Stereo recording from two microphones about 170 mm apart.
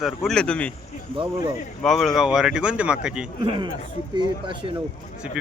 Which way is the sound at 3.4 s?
30° right (ahead or behind).